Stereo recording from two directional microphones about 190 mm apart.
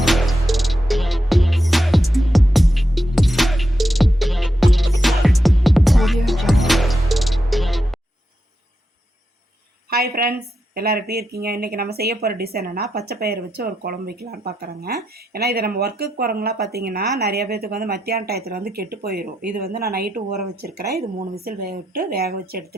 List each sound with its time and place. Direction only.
0.0 s music: centre (ahead or behind)
9.9 s a woman's voice: 55° right (ahead or behind)